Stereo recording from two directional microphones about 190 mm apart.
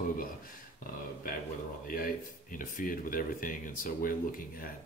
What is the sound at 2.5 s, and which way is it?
Speech, 45° left (ahead or behind).